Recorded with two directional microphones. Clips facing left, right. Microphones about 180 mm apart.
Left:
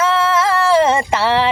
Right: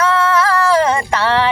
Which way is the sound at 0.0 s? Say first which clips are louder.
Right 1 dB; 25° left (ahead or behind).